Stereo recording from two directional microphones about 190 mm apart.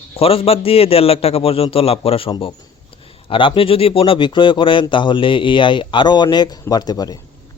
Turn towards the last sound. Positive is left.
turn(degrees=20)  # may be behind; listen again after turning